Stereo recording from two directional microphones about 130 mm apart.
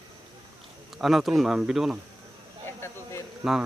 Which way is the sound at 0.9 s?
Centre (ahead or behind).